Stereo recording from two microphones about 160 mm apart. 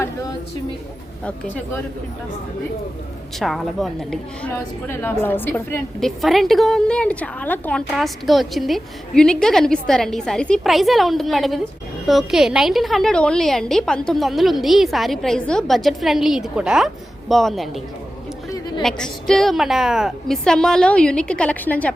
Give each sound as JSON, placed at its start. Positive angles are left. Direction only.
{"t": 0.0, "sound": "a sound", "side_deg": 20}
{"t": 3.3, "sound": "a woman's voice", "side_deg": 0}
{"t": 4.5, "sound": "a woman's voice", "side_deg": 15}
{"t": 6.0, "sound": "a woman's voice", "side_deg": 0}
{"t": 18.8, "sound": "a woman's voice", "side_deg": 5}